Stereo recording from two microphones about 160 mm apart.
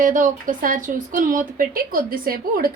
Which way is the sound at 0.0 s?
55° right (ahead or behind).